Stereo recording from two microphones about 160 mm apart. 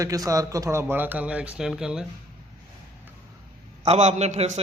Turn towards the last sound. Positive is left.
turn(degrees=-45)  # may be behind; listen again after turning